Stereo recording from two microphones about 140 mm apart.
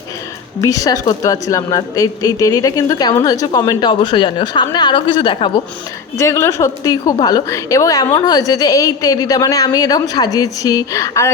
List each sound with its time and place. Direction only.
0.6 s a woman's voice: 25° left (ahead or behind)
6.1 s a woman's voice: 20° left (ahead or behind)